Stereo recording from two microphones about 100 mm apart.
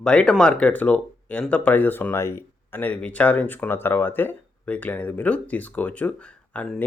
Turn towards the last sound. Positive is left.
turn(degrees=15)  # may be behind; listen again after turning